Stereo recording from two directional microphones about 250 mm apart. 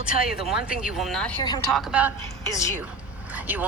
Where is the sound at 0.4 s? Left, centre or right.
Centre.